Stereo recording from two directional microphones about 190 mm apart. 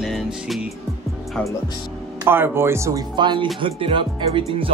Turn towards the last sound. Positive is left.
turn(degrees=-30)  # may be behind; listen again after turning